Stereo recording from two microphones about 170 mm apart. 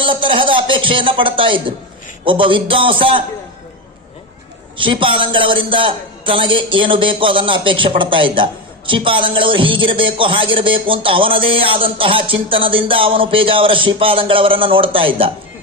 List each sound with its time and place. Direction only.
0.0 s speech: 30° right (ahead or behind)
4.8 s a man's voice: 30° right (ahead or behind)